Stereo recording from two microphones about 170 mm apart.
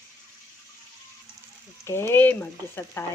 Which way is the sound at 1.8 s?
15° left (ahead or behind).